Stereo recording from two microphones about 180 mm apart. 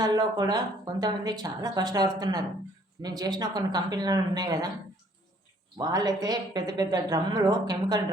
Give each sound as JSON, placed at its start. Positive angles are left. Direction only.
{"t": 0.0, "sound": "a woman's voice", "side_deg": -20}
{"t": 5.7, "sound": "a woman's voice", "side_deg": -20}